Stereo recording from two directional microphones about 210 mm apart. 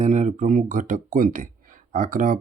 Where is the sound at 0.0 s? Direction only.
35° right (ahead or behind).